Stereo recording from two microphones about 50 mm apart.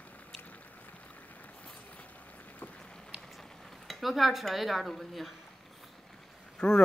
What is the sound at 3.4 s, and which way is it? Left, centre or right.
Speech, centre.